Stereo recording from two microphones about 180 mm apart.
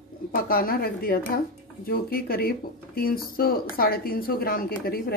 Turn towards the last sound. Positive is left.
turn(degrees=55)  # may be behind; listen again after turning